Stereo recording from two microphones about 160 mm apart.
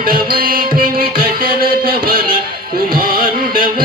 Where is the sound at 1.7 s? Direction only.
65° right (ahead or behind).